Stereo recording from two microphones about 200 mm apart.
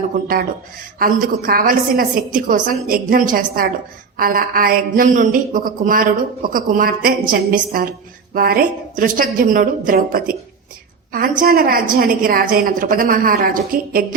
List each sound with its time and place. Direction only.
0.9 s a woman's voice: 45° right (ahead or behind)